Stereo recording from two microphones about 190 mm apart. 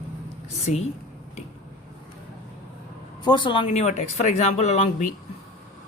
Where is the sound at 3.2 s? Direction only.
25° left (ahead or behind).